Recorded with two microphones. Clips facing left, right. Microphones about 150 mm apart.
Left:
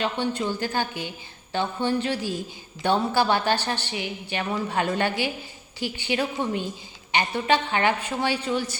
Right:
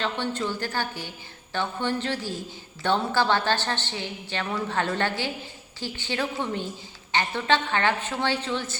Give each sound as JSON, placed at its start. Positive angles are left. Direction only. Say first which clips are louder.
{"t": 0.0, "sound": "a woman's voice", "louder": "left 2 dB", "side_deg": 15}